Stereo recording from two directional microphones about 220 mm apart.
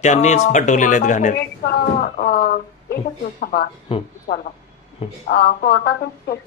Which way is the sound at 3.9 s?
25° left (ahead or behind).